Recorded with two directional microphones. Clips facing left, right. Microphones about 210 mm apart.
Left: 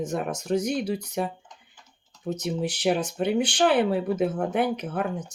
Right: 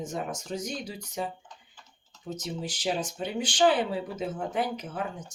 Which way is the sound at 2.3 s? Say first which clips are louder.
Left 7 dB; 65° left (ahead or behind).